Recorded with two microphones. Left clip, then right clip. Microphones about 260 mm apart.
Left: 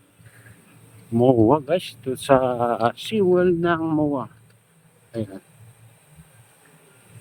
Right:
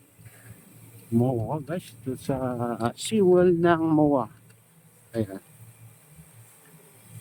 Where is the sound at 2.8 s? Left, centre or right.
Centre.